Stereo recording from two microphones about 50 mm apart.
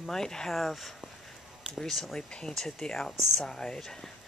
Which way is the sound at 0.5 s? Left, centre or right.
Centre.